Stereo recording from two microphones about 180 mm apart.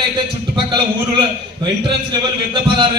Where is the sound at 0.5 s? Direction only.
25° right (ahead or behind).